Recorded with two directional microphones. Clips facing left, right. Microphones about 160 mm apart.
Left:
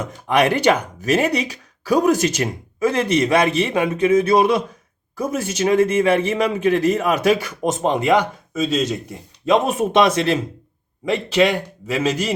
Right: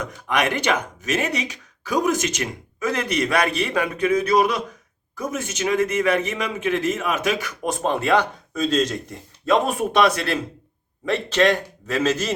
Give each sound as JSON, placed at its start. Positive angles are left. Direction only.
{"t": 0.0, "sound": "a man's voice", "side_deg": 30}
{"t": 9.6, "sound": "a man's voice", "side_deg": 20}